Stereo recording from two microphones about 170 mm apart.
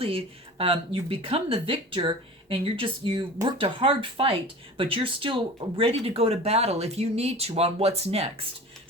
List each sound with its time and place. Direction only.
0.0 s speech: 35° right (ahead or behind)